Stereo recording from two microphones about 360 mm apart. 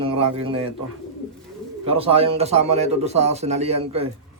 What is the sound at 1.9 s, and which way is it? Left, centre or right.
Speech, centre.